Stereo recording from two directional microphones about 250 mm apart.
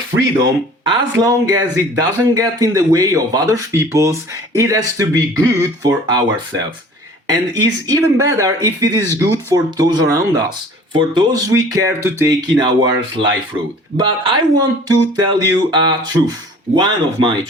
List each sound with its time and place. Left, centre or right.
0.9 s speech: centre